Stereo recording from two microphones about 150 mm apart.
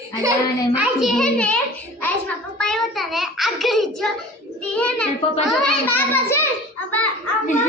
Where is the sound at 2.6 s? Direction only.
5° left (ahead or behind).